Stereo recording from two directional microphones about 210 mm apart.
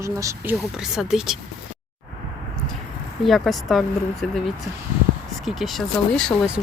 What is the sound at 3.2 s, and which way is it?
Speech, centre (ahead or behind).